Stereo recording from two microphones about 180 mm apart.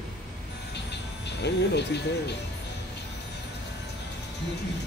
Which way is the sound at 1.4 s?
70° left (ahead or behind).